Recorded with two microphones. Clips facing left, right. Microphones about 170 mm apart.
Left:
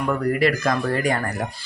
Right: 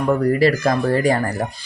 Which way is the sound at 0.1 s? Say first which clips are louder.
Right 5 dB; 35° right (ahead or behind).